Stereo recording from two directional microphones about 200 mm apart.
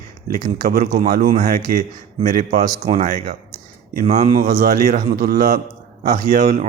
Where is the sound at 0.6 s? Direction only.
45° right (ahead or behind).